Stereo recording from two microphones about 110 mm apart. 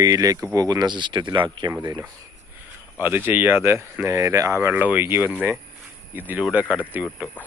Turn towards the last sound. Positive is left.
turn(degrees=-10)  # may be behind; listen again after turning